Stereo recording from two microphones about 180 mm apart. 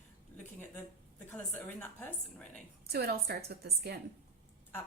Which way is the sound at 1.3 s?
10° left (ahead or behind).